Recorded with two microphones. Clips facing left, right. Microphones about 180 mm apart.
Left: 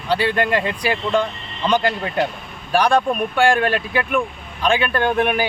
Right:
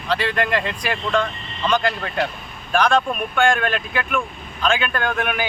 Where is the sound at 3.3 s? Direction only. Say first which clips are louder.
Left 2 dB; 35° left (ahead or behind).